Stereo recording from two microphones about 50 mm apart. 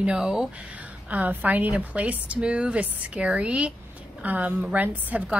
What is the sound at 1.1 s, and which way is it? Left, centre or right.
A woman's voice, right.